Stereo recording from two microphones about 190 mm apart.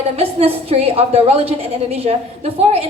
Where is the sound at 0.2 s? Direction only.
30° right (ahead or behind).